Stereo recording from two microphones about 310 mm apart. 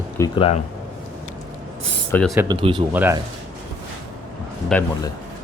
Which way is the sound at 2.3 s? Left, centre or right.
Centre.